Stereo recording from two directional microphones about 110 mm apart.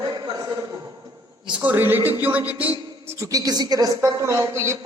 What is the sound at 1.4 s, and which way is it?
A man's voice, 15° right (ahead or behind).